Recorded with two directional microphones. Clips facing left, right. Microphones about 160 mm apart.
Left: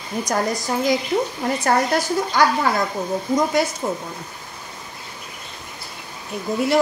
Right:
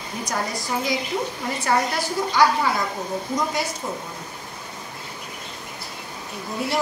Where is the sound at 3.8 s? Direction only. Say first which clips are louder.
Left 5 dB; 55° left (ahead or behind).